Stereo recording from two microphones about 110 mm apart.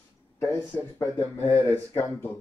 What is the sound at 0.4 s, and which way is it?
Speech, 25° left (ahead or behind).